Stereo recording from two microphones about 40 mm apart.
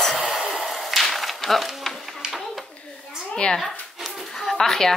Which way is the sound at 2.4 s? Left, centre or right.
Centre.